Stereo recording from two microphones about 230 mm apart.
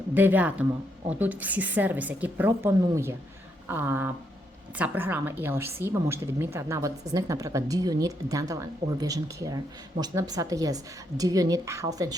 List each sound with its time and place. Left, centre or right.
0.1 s a woman's voice: centre